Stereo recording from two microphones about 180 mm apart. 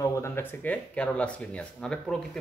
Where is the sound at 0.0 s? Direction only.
15° left (ahead or behind).